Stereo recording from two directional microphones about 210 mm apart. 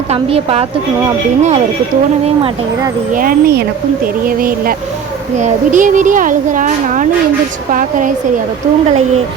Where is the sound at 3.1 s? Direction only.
45° right (ahead or behind).